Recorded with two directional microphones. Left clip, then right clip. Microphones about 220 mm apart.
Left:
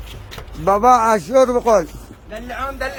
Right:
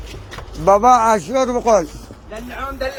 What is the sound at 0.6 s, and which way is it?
A man's voice, 15° left (ahead or behind).